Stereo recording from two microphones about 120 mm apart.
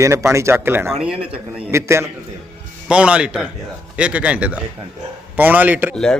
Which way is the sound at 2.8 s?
10° right (ahead or behind).